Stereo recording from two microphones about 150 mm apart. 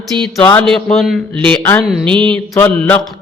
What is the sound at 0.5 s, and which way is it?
A man's voice, 5° left (ahead or behind).